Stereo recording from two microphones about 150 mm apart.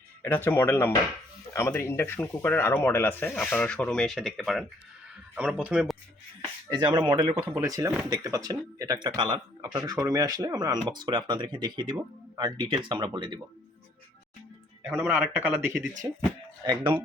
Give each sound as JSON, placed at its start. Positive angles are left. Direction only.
{"t": 0.2, "sound": "speech", "side_deg": 15}
{"t": 6.7, "sound": "speech", "side_deg": -30}
{"t": 15.1, "sound": "speech", "side_deg": -10}
{"t": 16.6, "sound": "speech", "side_deg": -30}